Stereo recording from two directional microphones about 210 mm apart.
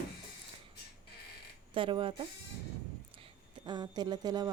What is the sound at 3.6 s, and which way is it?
Speech, 20° right (ahead or behind).